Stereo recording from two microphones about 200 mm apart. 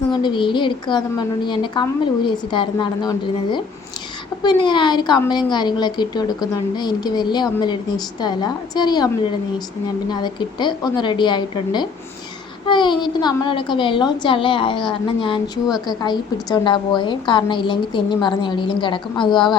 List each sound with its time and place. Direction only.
0.1 s a woman's voice: 25° left (ahead or behind)